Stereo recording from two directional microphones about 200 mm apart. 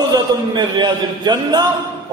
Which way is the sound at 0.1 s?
20° right (ahead or behind).